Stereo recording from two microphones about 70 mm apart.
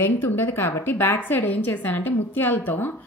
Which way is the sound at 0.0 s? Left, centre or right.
Left.